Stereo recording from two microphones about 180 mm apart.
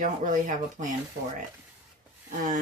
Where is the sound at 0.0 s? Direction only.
45° right (ahead or behind).